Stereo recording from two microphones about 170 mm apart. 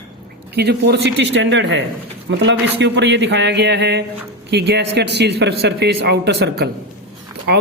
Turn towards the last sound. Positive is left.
turn(degrees=-75)  # may be behind; listen again after turning